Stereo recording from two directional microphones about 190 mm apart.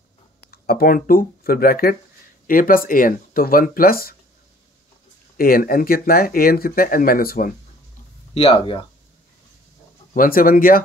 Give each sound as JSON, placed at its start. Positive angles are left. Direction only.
{"t": 0.5, "sound": "speech", "side_deg": 55}
{"t": 5.4, "sound": "speech", "side_deg": 50}
{"t": 8.4, "sound": "speech", "side_deg": 30}
{"t": 10.1, "sound": "speech", "side_deg": 50}